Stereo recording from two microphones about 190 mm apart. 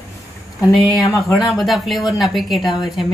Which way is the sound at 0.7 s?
Centre (ahead or behind).